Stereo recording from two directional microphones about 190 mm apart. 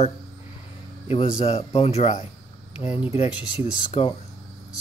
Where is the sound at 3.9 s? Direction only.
30° left (ahead or behind).